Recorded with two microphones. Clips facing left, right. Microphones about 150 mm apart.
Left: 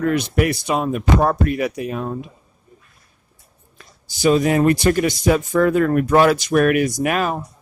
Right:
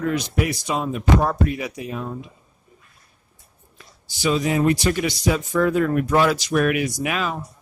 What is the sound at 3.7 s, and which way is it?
Speech, 50° left (ahead or behind).